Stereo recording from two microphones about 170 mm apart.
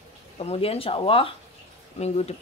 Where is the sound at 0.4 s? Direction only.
35° left (ahead or behind).